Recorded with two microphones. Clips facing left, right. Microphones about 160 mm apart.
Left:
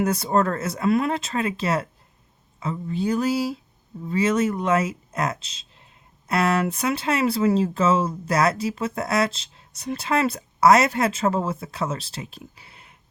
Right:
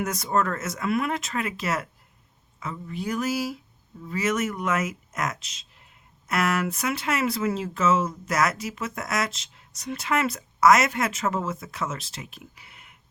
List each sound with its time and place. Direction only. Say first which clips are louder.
0.0 s speech: left 4 dB; 30° left (ahead or behind)